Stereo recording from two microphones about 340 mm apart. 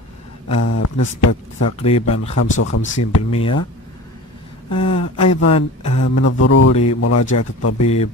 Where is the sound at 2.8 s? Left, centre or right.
Left.